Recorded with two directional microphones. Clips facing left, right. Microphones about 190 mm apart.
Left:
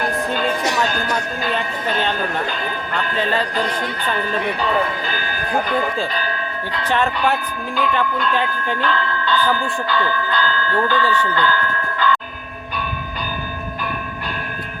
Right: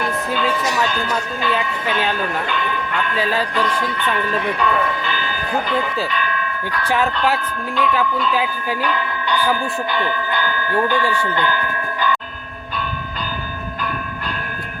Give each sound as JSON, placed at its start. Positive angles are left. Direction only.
{"t": 0.9, "sound": "speech", "side_deg": 40}
{"t": 3.2, "sound": "speech", "side_deg": -5}
{"t": 3.5, "sound": "speech", "side_deg": 40}
{"t": 6.1, "sound": "bell", "side_deg": 35}
{"t": 6.8, "sound": "speech", "side_deg": -5}
{"t": 11.3, "sound": "tubular bells", "side_deg": -20}